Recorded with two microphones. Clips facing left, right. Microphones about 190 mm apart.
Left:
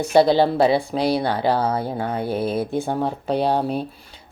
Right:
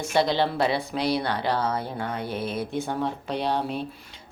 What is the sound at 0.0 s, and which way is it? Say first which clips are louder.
Speech: left 8 dB; 35° left (ahead or behind).